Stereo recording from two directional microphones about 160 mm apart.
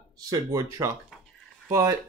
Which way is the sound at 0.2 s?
20° right (ahead or behind).